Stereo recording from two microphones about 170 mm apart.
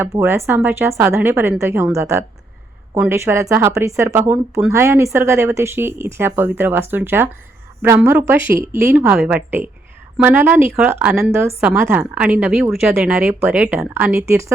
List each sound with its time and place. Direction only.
0.0 s speech: 15° right (ahead or behind)